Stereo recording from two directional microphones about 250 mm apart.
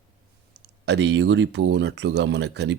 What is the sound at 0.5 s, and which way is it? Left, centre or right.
Speech, right.